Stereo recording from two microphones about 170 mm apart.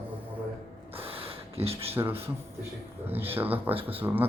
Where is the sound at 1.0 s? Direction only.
35° right (ahead or behind).